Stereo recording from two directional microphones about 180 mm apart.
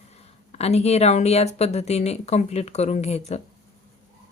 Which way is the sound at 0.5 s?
35° left (ahead or behind).